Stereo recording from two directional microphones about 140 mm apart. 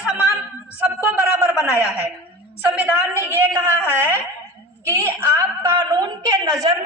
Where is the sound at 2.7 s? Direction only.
15° right (ahead or behind).